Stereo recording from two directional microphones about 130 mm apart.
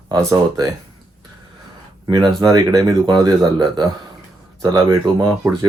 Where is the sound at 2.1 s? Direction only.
30° right (ahead or behind).